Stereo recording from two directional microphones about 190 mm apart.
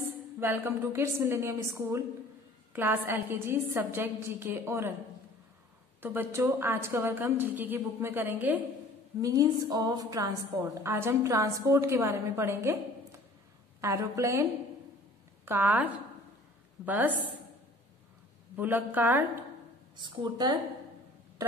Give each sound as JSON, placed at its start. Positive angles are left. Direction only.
{"t": 0.4, "sound": "a woman's voice", "side_deg": -10}
{"t": 6.0, "sound": "a woman's voice", "side_deg": -10}
{"t": 13.7, "sound": "a woman's voice", "side_deg": -15}
{"t": 18.6, "sound": "a woman's voice", "side_deg": -10}
{"t": 20.0, "sound": "speech", "side_deg": -25}